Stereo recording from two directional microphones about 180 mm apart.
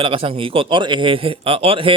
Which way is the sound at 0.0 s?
30° right (ahead or behind).